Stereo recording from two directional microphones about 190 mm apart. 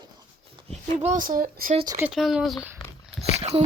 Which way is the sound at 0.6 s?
35° right (ahead or behind).